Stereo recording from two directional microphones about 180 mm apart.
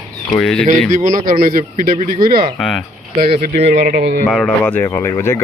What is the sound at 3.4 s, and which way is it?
Speech, 70° right (ahead or behind).